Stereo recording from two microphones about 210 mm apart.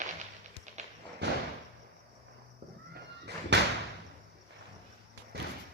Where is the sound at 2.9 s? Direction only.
50° right (ahead or behind).